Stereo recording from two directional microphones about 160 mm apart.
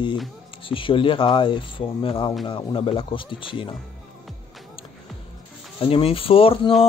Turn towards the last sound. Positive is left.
turn(degrees=35)  # may be behind; listen again after turning